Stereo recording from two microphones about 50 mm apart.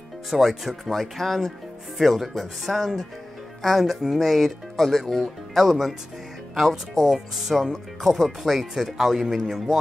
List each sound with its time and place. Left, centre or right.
0.3 s speech: centre